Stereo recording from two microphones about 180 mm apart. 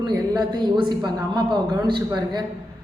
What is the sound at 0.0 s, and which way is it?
A woman's voice, 25° right (ahead or behind).